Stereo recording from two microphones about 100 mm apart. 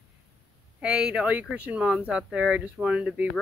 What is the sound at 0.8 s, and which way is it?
Speech, 10° right (ahead or behind).